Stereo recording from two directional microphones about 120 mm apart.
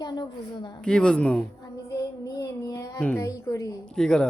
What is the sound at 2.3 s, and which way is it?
Child singing, 30° left (ahead or behind).